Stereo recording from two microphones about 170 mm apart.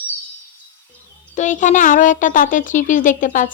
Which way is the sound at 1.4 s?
45° left (ahead or behind).